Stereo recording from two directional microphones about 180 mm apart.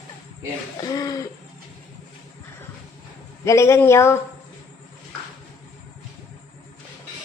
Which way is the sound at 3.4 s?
15° left (ahead or behind).